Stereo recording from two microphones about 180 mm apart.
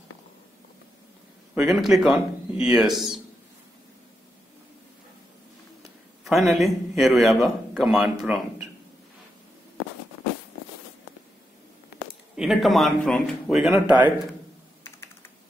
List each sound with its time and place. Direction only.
1.5 s speech: 5° right (ahead or behind)
5.8 s a man's voice: centre (ahead or behind)
12.4 s speech: centre (ahead or behind)